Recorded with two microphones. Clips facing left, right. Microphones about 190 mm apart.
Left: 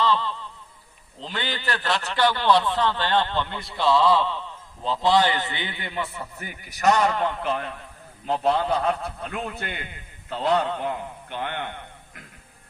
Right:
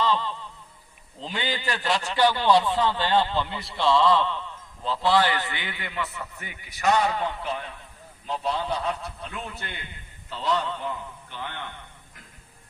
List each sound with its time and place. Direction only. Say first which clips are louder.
0.0 s a sound: left 2 dB; 15° right (ahead or behind)
1.2 s a man's voice: right 1 dB; 10° right (ahead or behind); by 4.4 s 10° left (ahead or behind)
4.9 s a man's voice: left 2 dB; 20° left (ahead or behind); by 11.8 s 60° left (ahead or behind)